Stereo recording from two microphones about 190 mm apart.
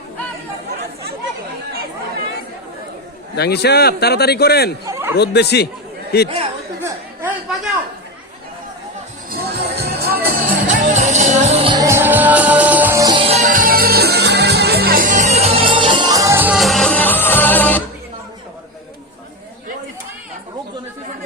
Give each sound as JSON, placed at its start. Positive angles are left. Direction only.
{"t": 3.3, "sound": "speech", "side_deg": 60}
{"t": 4.9, "sound": "a sound", "side_deg": -15}
{"t": 5.1, "sound": "speech", "side_deg": 60}
{"t": 6.2, "sound": "speech", "side_deg": -30}
{"t": 6.8, "sound": "chatter", "side_deg": -10}
{"t": 9.3, "sound": "music", "side_deg": -55}